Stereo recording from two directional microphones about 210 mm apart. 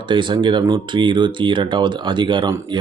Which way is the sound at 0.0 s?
20° right (ahead or behind).